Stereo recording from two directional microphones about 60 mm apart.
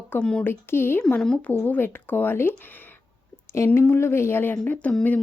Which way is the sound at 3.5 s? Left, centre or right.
Left.